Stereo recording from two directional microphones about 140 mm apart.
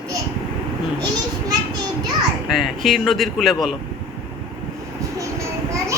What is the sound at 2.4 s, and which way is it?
Speech, centre (ahead or behind).